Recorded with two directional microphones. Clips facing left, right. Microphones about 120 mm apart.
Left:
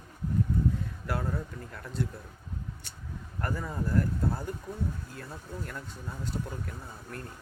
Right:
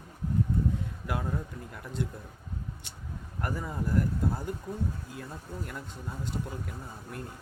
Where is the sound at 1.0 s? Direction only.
15° right (ahead or behind).